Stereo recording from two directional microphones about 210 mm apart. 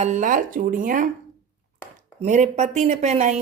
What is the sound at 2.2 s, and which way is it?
Speech, 35° right (ahead or behind).